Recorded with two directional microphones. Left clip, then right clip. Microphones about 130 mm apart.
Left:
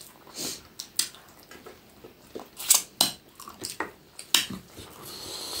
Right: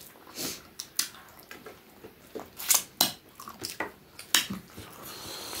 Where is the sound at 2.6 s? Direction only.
10° left (ahead or behind).